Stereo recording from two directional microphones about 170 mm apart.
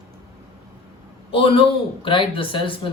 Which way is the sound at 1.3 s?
30° left (ahead or behind).